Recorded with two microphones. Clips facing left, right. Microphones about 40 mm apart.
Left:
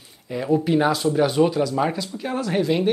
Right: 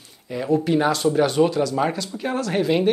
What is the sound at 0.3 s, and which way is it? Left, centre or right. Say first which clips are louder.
Speech: even; centre.